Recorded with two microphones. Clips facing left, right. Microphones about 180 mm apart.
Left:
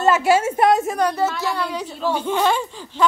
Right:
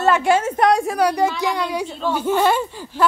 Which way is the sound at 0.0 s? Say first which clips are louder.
Even; 5° left (ahead or behind).